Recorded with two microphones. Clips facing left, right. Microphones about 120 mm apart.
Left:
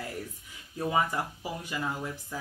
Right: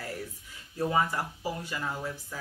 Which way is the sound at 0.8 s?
15° left (ahead or behind).